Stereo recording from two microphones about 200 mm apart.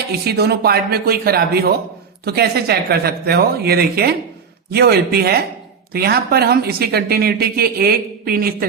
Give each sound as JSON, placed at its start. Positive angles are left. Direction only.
{"t": 0.3, "sound": "speech", "side_deg": -50}